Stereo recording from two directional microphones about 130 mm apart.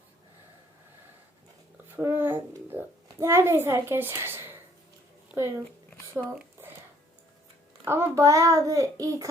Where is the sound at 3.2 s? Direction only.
20° right (ahead or behind).